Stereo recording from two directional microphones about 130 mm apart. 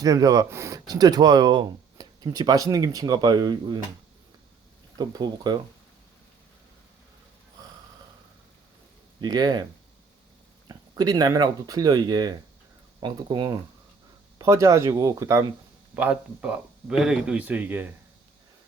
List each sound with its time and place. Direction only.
0.0 s speech: 30° right (ahead or behind)
4.9 s speech: 35° right (ahead or behind)
9.2 s speech: 35° right (ahead or behind)
10.7 s speech: 30° right (ahead or behind)
16.0 s speech: 10° right (ahead or behind)